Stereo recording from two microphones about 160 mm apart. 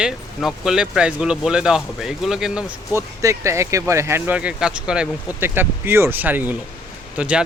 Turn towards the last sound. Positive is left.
turn(degrees=-10)  # may be behind; listen again after turning